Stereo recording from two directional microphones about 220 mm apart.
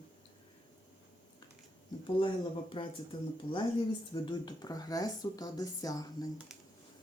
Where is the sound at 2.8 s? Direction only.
25° left (ahead or behind).